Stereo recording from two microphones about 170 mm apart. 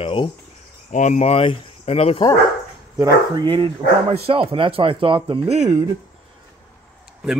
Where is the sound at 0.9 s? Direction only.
45° left (ahead or behind).